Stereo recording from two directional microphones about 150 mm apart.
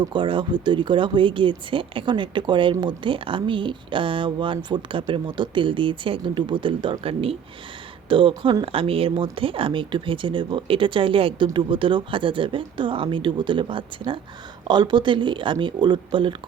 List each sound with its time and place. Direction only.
0.0 s speech: 30° right (ahead or behind)